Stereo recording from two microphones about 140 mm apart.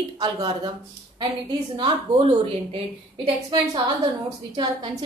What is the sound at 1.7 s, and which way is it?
Speech, 35° right (ahead or behind).